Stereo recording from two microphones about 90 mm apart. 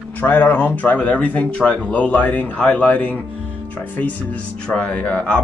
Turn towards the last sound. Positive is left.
turn(degrees=15)  # may be behind; listen again after turning